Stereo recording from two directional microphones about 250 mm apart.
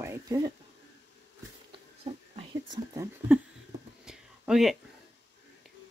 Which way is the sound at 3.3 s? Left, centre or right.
Centre.